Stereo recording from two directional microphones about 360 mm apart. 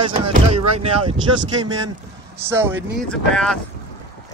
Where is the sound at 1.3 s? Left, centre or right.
Right.